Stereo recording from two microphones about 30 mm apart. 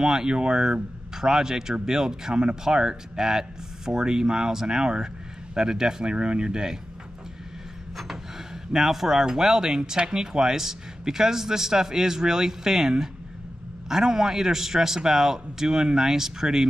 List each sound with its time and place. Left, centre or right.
0.0 s speech: right
8.7 s speech: centre